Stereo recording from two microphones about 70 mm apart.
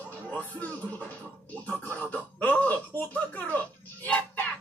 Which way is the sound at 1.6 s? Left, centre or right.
Left.